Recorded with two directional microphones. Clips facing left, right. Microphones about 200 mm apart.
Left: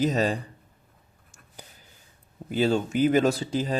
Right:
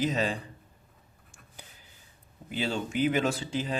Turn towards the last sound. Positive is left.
turn(degrees=40)  # may be behind; listen again after turning